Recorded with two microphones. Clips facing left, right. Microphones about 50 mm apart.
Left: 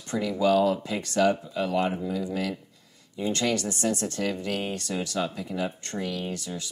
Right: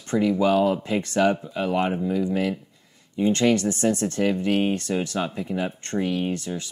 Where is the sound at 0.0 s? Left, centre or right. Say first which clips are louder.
Right 4 dB; right.